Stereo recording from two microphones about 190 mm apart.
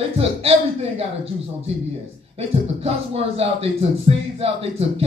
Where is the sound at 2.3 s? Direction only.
30° right (ahead or behind).